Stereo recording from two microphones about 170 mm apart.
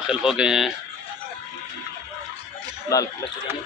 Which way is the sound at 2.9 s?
20° left (ahead or behind).